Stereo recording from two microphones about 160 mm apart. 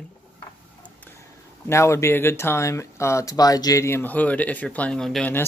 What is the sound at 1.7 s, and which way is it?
Speech, 15° left (ahead or behind).